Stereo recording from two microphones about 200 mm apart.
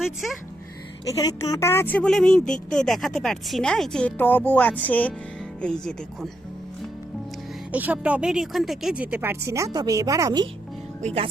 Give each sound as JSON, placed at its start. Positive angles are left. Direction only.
{"t": 1.0, "sound": "a woman's voice", "side_deg": 20}
{"t": 7.7, "sound": "speech", "side_deg": -10}
{"t": 11.0, "sound": "speech", "side_deg": -30}